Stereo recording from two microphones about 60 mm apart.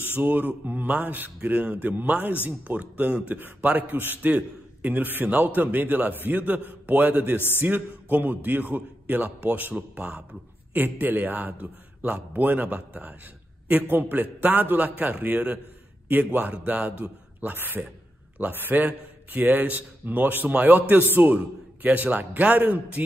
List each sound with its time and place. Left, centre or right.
0.1 s a man's voice: right
7.3 s a man's voice: left
7.6 s a man's voice: right
10.7 s a man's voice: right